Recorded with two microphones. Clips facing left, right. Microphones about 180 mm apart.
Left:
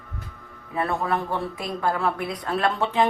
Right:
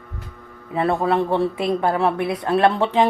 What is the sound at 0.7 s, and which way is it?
A man's voice, 25° right (ahead or behind).